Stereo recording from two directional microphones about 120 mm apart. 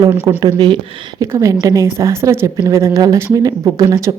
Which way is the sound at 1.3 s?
25° right (ahead or behind).